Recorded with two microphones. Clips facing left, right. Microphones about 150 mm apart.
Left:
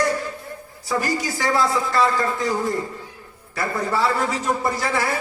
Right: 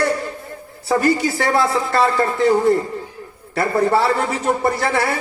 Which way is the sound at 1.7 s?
65° right (ahead or behind).